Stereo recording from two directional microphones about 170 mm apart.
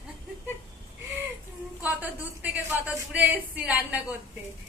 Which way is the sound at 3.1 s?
10° right (ahead or behind).